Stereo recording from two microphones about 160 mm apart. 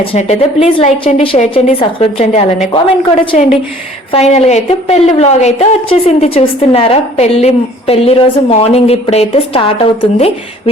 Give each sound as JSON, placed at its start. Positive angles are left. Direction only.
{"t": 0.0, "sound": "a woman's voice", "side_deg": 40}
{"t": 4.1, "sound": "a woman's voice", "side_deg": 45}